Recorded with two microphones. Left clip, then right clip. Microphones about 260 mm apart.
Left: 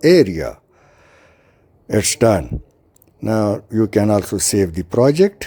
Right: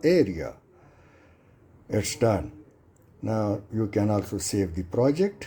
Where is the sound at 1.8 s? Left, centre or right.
Left.